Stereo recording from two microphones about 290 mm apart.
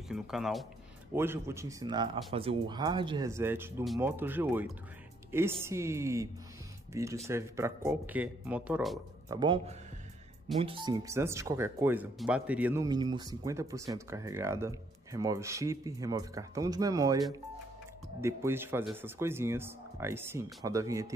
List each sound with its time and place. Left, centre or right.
0.1 s speech: centre
9.3 s speech: centre
18.2 s speech: centre